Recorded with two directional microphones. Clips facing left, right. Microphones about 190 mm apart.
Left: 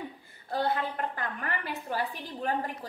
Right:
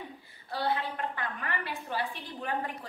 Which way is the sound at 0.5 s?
45° left (ahead or behind).